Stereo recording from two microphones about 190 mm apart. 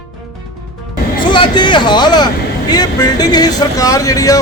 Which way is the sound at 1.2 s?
25° left (ahead or behind).